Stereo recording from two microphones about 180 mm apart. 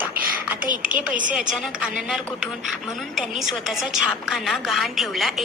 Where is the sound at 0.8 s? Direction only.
50° right (ahead or behind).